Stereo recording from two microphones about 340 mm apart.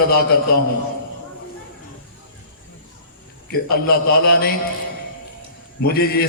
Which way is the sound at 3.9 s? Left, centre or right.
Left.